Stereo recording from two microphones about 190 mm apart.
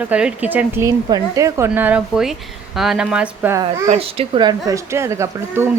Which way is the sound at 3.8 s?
35° right (ahead or behind).